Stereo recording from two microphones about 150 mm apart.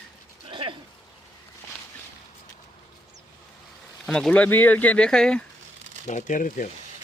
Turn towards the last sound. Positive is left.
turn(degrees=60)  # may be behind; listen again after turning